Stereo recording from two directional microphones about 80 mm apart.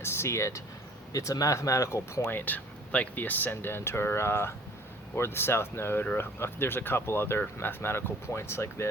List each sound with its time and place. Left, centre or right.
0.0 s speech: left
2.2 s speech: left